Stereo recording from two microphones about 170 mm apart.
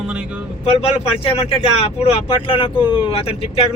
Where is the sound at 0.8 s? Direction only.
35° left (ahead or behind).